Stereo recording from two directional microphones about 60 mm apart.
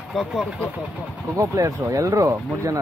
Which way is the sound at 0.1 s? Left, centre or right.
Centre.